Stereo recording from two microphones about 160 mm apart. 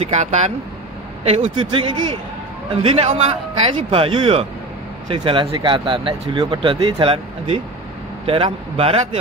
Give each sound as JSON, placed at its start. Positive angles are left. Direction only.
{"t": 0.0, "sound": "speech", "side_deg": -45}
{"t": 1.2, "sound": "speech", "side_deg": -35}